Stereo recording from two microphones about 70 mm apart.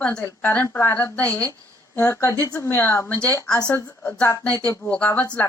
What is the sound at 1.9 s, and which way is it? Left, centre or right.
A woman's voice, left.